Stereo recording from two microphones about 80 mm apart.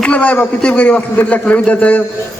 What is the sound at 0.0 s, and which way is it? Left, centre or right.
A man's voice, centre.